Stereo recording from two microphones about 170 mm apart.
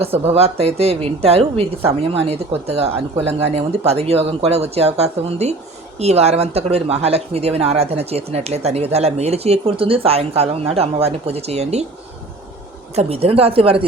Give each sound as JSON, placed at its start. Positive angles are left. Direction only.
{"t": 0.0, "sound": "speech", "side_deg": -35}
{"t": 13.0, "sound": "speech", "side_deg": -35}